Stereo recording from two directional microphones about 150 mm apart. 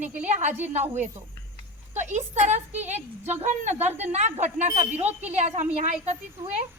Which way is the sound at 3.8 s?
45° right (ahead or behind).